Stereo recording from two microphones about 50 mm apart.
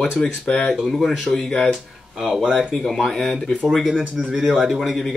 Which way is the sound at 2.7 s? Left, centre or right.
Centre.